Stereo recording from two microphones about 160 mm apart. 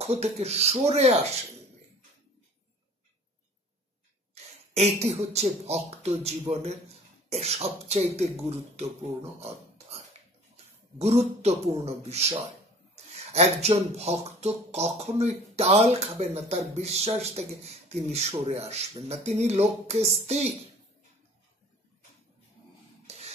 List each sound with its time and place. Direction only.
0.0 s speech: 40° right (ahead or behind)
4.7 s a man's voice: 40° right (ahead or behind)
23.0 s scrape: 40° right (ahead or behind)